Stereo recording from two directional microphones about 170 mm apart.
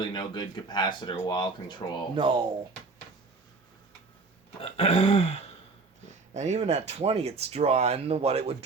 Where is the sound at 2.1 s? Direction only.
30° right (ahead or behind).